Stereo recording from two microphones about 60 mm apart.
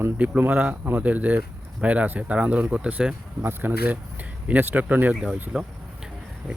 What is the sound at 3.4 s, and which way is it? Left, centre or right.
Speech, right.